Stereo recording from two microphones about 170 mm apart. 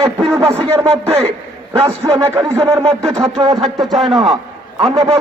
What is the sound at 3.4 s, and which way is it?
Speech, 30° right (ahead or behind).